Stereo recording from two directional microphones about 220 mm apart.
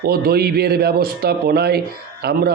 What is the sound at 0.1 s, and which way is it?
Speech, 45° right (ahead or behind).